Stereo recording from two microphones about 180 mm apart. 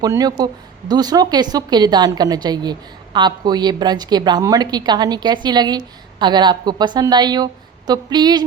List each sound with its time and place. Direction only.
0.0 s speech: 20° right (ahead or behind)